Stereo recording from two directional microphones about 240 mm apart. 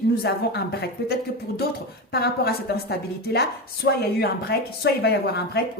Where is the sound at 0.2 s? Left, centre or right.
Left.